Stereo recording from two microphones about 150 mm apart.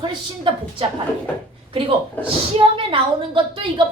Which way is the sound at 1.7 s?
35° right (ahead or behind).